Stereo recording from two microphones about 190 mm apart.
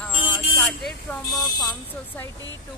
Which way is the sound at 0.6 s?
Centre (ahead or behind).